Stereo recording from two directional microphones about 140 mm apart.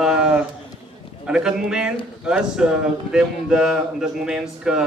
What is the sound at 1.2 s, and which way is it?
A man's voice, 5° right (ahead or behind).